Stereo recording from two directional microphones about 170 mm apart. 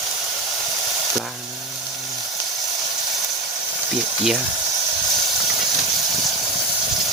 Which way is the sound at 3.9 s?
5° right (ahead or behind).